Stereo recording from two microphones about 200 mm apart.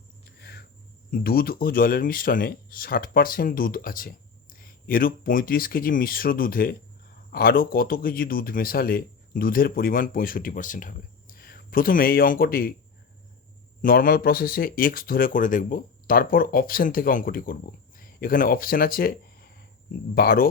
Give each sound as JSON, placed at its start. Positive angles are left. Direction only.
{"t": 0.3, "sound": "a sound", "side_deg": 50}
{"t": 1.1, "sound": "speech", "side_deg": 50}
{"t": 13.8, "sound": "speech", "side_deg": 45}